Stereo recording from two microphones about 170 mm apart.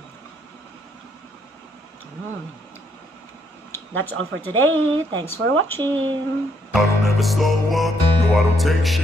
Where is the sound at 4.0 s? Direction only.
10° left (ahead or behind).